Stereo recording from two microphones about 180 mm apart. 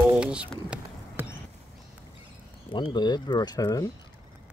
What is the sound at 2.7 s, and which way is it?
Speech, 25° left (ahead or behind).